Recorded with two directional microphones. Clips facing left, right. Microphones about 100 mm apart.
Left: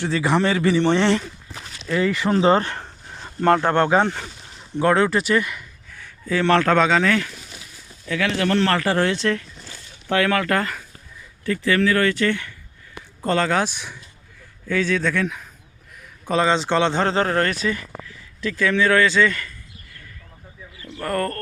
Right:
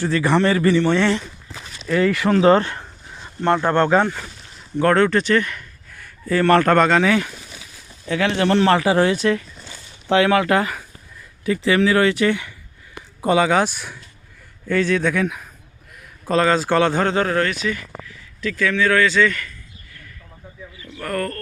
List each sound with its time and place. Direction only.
0.0 s a man's voice: centre (ahead or behind)
0.8 s speech: 20° left (ahead or behind)
1.9 s a man's voice: 5° left (ahead or behind)
2.6 s a sound: 40° left (ahead or behind)
3.8 s speech: 20° left (ahead or behind)
4.8 s speech: 5° left (ahead or behind)
5.9 s speech: 5° right (ahead or behind)
8.0 s speech: 30° right (ahead or behind)
8.5 s speech: 15° right (ahead or behind)
10.1 s a man's voice: 20° right (ahead or behind)
16.5 s speech: 20° left (ahead or behind)
20.8 s speech: 30° left (ahead or behind)